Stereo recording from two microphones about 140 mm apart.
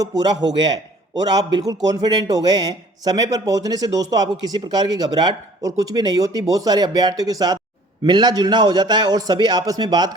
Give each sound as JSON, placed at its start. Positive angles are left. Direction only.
{"t": 0.4, "sound": "a man's voice", "side_deg": -30}